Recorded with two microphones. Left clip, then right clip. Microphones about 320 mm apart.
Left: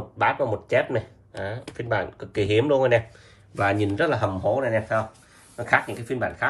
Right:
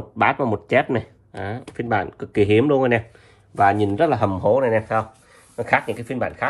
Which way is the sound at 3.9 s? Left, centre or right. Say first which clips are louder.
Right 4 dB; centre.